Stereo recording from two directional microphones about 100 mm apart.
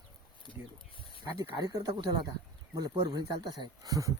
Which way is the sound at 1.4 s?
40° right (ahead or behind).